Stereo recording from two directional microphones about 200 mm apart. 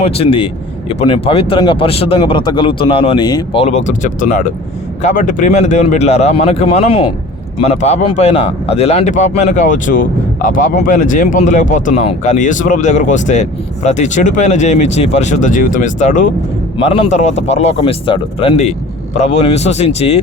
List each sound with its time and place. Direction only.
0.0 s a man's voice: 30° left (ahead or behind)